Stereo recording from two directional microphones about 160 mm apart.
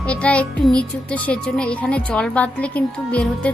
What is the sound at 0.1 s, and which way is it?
A child's voice, 5° left (ahead or behind).